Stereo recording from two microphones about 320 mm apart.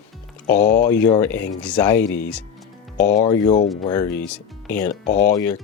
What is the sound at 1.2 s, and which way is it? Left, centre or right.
Speech, centre.